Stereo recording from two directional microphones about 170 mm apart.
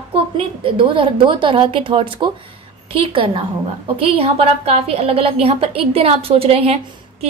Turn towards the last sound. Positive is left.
turn(degrees=-35)  # may be behind; listen again after turning